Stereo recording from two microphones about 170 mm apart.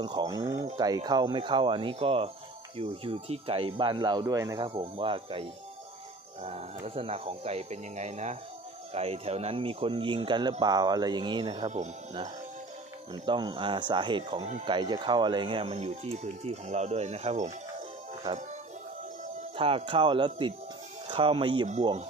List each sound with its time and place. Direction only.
0.0 s speech: 25° right (ahead or behind)
4.6 s speech: 30° right (ahead or behind)
6.4 s speech: 35° right (ahead or behind)
11.6 s speech: 40° right (ahead or behind)
13.1 s speech: 25° right (ahead or behind)
19.5 s speech: 30° right (ahead or behind)